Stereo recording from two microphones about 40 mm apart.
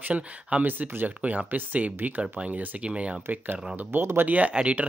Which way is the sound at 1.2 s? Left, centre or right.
Right.